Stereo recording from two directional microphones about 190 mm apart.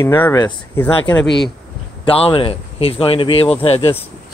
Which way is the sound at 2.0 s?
30° left (ahead or behind).